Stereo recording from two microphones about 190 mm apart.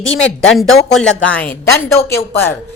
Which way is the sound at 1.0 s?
90° left.